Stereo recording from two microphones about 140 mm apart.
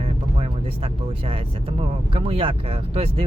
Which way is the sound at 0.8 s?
45° right (ahead or behind).